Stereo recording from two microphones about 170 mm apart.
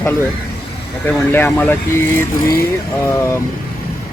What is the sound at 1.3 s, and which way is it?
Speech, 10° left (ahead or behind).